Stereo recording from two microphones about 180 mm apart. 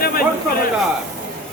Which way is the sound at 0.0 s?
55° left (ahead or behind).